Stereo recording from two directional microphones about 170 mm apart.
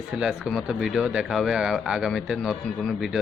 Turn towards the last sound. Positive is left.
turn(degrees=0)  # may be behind; listen again after turning